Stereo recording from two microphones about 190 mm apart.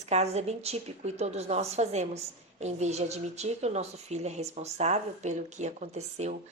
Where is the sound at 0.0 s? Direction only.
35° right (ahead or behind).